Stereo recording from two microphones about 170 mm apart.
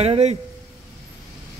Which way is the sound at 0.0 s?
35° right (ahead or behind).